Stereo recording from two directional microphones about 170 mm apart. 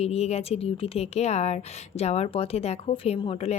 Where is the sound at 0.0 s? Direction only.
40° left (ahead or behind).